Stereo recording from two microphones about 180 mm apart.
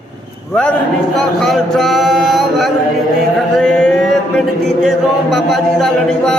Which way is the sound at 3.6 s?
5° left (ahead or behind).